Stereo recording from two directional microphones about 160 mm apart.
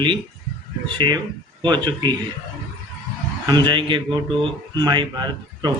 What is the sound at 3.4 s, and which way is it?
Speech, 30° right (ahead or behind).